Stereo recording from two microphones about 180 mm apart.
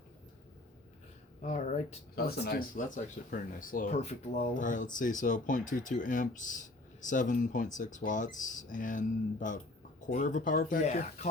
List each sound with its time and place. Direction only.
1.4 s speech: 40° left (ahead or behind)
2.1 s speech: 60° left (ahead or behind); by 11.3 s 40° left (ahead or behind)